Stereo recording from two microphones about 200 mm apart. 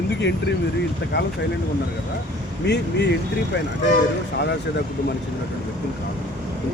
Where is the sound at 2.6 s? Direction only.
60° left (ahead or behind).